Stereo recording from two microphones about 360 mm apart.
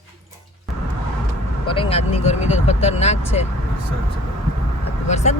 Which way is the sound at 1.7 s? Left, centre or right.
Centre.